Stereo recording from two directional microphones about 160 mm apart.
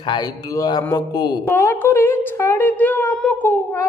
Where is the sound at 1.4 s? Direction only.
15° left (ahead or behind).